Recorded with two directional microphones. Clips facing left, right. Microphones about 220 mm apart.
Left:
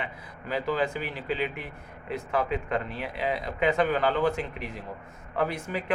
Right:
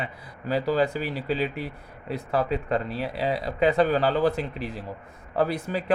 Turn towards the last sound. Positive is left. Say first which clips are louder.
# right 3 dB
turn(degrees=-35)  # may be behind; listen again after turning